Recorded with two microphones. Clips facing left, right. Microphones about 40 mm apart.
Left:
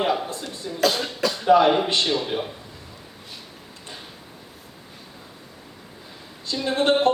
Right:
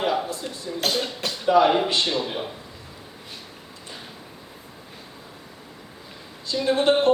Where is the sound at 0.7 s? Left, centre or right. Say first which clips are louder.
Right 3 dB; centre.